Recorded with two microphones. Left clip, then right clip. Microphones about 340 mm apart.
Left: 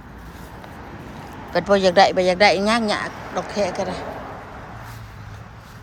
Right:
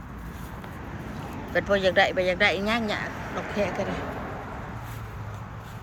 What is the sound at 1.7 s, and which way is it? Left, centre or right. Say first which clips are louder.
Speech: left 7 dB; centre.